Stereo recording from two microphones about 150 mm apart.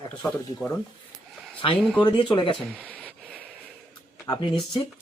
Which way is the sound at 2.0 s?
30° left (ahead or behind).